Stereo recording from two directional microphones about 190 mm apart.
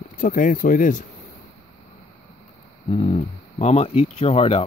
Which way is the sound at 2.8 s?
30° left (ahead or behind).